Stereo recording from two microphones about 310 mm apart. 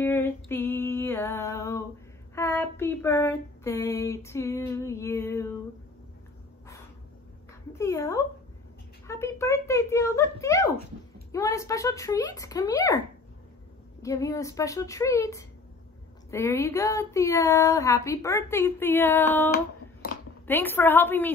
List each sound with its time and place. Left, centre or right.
0.0 s music: centre
2.3 s female singing: centre
7.7 s a sound: centre
11.3 s speech: centre
14.0 s speech: centre
20.0 s a sound: left
20.4 s speech: centre